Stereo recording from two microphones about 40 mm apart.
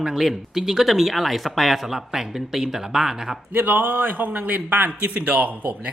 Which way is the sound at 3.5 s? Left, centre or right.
Right.